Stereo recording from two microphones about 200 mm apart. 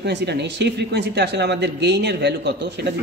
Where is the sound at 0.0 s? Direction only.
55° right (ahead or behind).